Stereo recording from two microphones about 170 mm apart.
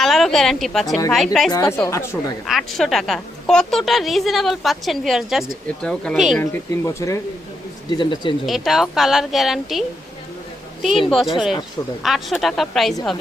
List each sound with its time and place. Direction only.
0.0 s a woman's voice: centre (ahead or behind)
1.5 s speech: 20° left (ahead or behind)
2.5 s a woman's voice: centre (ahead or behind)
6.4 s speech: 15° left (ahead or behind)
8.4 s a woman's voice: centre (ahead or behind)
11.1 s a woman's voice: centre (ahead or behind)